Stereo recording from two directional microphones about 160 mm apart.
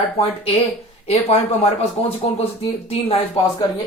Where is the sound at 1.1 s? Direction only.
40° left (ahead or behind).